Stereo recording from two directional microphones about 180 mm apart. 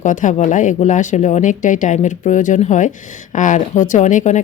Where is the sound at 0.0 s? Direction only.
45° left (ahead or behind).